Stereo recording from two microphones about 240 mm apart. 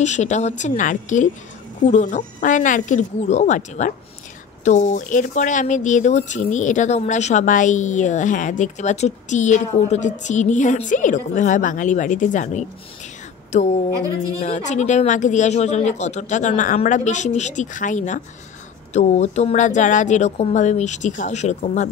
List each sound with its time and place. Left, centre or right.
0.0 s a woman's voice: left